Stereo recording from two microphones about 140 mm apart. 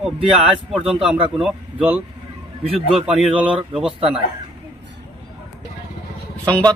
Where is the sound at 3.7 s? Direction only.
5° right (ahead or behind).